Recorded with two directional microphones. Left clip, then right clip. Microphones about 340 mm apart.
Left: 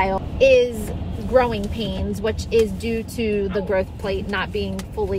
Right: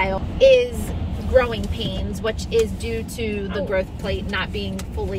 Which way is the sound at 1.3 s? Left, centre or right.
Centre.